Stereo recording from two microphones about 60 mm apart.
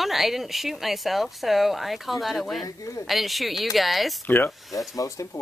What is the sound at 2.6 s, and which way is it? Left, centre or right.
Speech, left.